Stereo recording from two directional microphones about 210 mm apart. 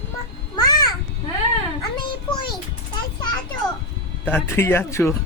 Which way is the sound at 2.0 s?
20° left (ahead or behind).